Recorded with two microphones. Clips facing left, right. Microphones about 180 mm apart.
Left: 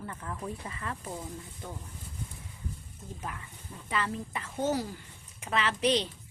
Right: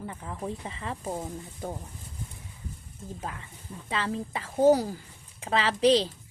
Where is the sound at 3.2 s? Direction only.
25° right (ahead or behind).